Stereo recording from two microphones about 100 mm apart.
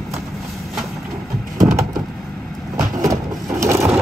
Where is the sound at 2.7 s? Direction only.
30° right (ahead or behind).